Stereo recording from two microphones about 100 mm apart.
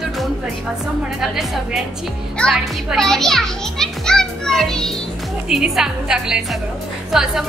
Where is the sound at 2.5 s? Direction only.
Centre (ahead or behind).